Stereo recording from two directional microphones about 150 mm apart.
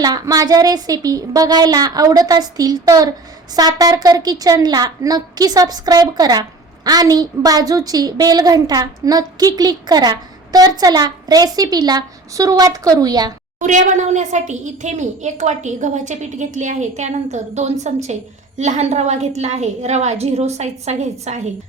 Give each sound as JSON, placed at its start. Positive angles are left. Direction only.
{"t": 0.0, "sound": "a woman's voice", "side_deg": -25}
{"t": 13.6, "sound": "speech", "side_deg": -55}